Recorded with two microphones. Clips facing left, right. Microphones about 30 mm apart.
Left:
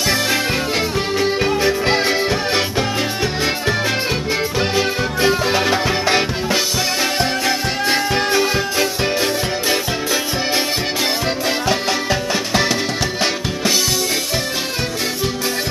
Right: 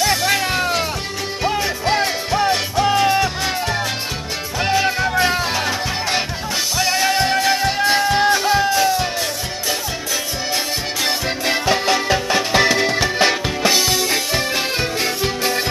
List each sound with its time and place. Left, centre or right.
1.4 s music: centre
4.7 s music: centre
5.5 s music: centre
7.0 s music: centre
11.4 s music: centre